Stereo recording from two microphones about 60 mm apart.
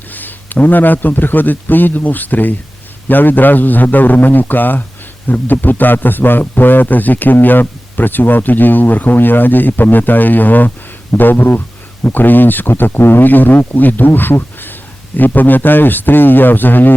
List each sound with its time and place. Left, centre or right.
0.1 s a man's voice: left